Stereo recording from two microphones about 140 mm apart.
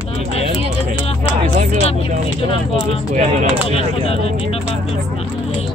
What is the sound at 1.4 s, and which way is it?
Speech, 50° right (ahead or behind).